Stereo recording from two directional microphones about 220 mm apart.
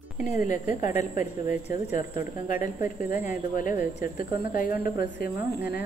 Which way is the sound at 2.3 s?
35° left (ahead or behind).